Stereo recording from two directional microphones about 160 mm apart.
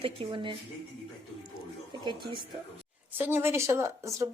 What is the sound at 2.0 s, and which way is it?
Speech, 30° right (ahead or behind).